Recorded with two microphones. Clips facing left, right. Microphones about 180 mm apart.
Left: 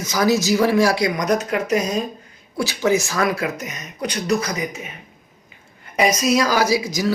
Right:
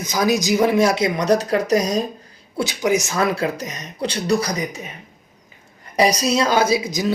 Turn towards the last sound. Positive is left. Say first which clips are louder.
# right 1 dB
turn(degrees=-20)  # may be behind; listen again after turning